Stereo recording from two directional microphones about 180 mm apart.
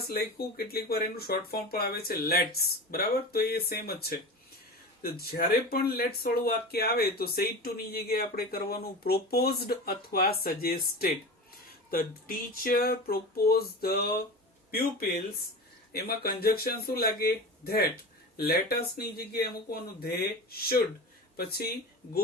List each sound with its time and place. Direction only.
0.1 s speech: 60° left (ahead or behind)
12.6 s speech: 55° left (ahead or behind)
15.9 s speech: 60° left (ahead or behind)